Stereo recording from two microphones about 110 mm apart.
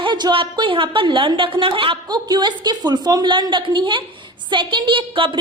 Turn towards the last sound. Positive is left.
turn(degrees=-50)  # may be behind; listen again after turning